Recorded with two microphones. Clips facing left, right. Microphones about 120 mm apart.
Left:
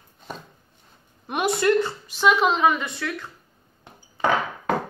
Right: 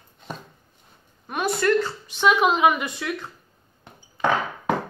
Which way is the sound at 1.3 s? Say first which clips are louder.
Left 1 dB; 20° left (ahead or behind).